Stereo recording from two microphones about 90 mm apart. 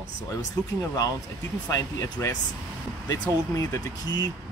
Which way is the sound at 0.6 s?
35° left (ahead or behind).